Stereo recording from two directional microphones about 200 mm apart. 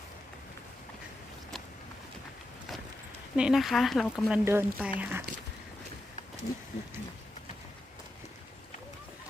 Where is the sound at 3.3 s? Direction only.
5° right (ahead or behind).